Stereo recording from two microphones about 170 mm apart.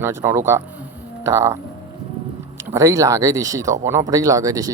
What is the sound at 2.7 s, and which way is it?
Speech, 20° right (ahead or behind).